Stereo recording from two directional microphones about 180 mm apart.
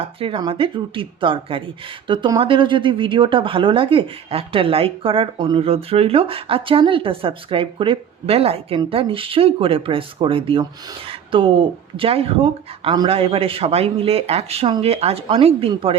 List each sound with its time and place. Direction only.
0.2 s speech: 30° right (ahead or behind)